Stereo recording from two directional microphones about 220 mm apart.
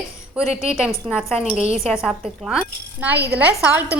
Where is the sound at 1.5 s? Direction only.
30° right (ahead or behind).